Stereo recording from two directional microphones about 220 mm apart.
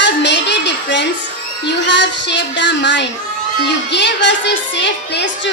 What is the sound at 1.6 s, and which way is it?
A woman's voice, 50° left (ahead or behind).